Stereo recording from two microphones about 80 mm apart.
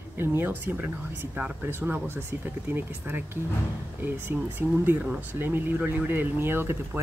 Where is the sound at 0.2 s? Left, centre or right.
Right.